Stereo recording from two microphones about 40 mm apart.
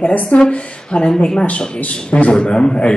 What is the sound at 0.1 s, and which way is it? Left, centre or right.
Speech, left.